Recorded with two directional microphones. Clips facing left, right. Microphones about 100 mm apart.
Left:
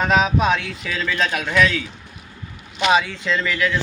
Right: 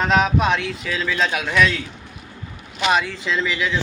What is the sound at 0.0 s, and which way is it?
Speech, centre (ahead or behind).